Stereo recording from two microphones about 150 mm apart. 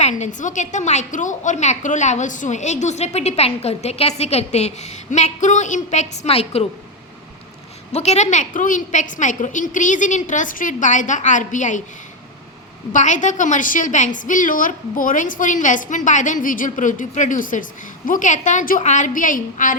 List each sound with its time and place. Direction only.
0.0 s a woman's voice: 55° left (ahead or behind)
7.9 s a woman's voice: 45° left (ahead or behind)
12.9 s a woman's voice: 55° left (ahead or behind)